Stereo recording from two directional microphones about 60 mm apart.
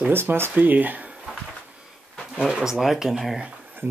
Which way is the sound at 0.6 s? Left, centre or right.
Right.